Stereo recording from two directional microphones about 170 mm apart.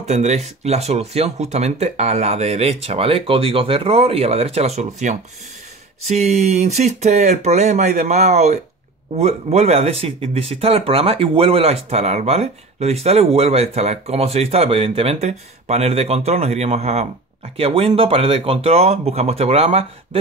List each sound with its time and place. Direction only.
0.0 s speech: 40° right (ahead or behind)